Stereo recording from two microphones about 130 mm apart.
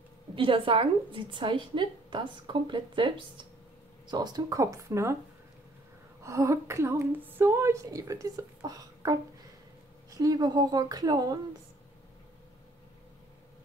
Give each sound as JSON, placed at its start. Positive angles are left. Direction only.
{"t": 0.4, "sound": "a woman's voice", "side_deg": -40}
{"t": 6.2, "sound": "speech", "side_deg": -20}